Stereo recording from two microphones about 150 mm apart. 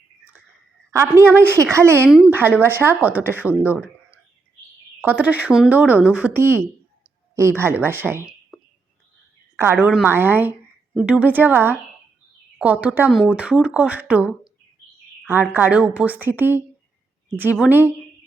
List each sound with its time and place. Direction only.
0.9 s a woman's voice: 20° right (ahead or behind)
2.0 s speech: 5° right (ahead or behind)
2.3 s a woman's voice: 15° right (ahead or behind)
4.9 s a woman's voice: 10° right (ahead or behind)
9.6 s a woman's voice: 15° right (ahead or behind)